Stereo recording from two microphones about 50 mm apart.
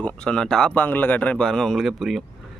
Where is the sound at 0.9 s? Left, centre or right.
Left.